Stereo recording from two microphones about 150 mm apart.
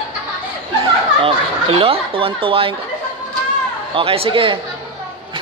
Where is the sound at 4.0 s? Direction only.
40° right (ahead or behind).